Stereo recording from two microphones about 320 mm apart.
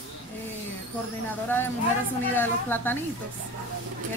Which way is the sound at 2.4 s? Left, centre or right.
Centre.